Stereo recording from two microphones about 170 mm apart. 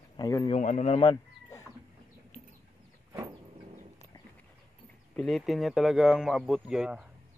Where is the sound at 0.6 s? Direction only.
45° left (ahead or behind).